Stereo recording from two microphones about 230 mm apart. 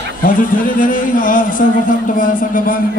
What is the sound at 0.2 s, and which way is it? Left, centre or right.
A man's voice, left.